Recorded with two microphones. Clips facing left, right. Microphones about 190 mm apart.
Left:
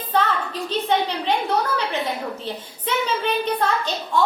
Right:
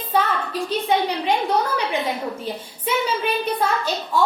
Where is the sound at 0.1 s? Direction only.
10° right (ahead or behind).